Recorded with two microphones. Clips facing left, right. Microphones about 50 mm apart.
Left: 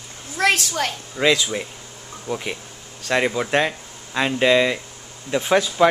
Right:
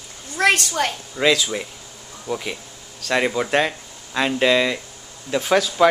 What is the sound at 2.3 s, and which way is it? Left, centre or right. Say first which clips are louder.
Speech: right 1 dB; left.